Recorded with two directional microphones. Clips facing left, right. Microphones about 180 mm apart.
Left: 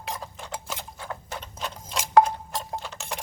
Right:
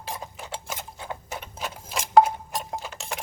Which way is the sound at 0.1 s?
10° right (ahead or behind).